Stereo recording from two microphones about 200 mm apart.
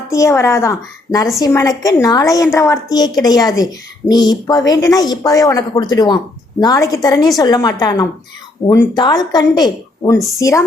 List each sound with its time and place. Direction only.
0.1 s a woman's voice: 15° left (ahead or behind)